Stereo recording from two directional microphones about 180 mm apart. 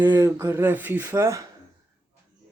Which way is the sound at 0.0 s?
15° right (ahead or behind).